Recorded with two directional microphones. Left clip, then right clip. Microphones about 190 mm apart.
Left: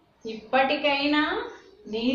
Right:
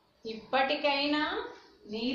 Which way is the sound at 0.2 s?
20° right (ahead or behind).